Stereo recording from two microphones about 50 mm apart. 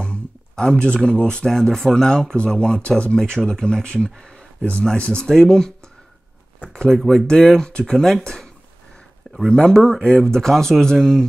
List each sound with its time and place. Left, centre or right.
0.0 s speech: centre
1.5 s speech: centre
6.7 s speech: centre
7.0 s speech: centre
9.5 s speech: centre